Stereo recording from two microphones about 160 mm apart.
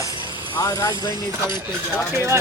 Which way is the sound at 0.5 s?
25° left (ahead or behind).